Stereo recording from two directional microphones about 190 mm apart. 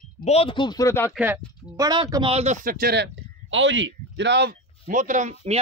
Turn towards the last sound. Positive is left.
turn(degrees=-35)  # may be behind; listen again after turning